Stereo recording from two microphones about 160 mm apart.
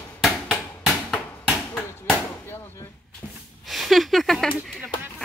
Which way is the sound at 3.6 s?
Centre (ahead or behind).